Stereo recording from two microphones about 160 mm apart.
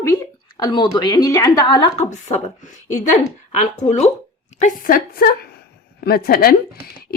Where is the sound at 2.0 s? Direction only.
50° left (ahead or behind).